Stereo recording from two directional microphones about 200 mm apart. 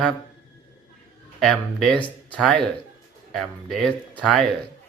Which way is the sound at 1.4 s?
Centre (ahead or behind).